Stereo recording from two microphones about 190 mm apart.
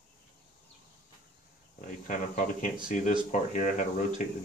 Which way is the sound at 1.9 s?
40° left (ahead or behind).